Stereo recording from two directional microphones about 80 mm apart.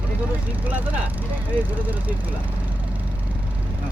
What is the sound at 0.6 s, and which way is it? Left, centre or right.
Vehicle, right.